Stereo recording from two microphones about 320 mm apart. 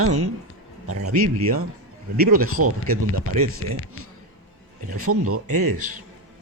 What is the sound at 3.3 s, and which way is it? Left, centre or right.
Speech, right.